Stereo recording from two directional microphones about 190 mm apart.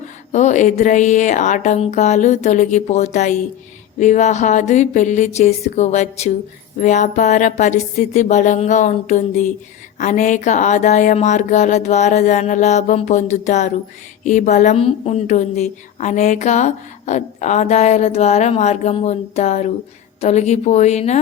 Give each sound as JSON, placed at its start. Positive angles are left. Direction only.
{"t": 0.3, "sound": "a woman's voice", "side_deg": 40}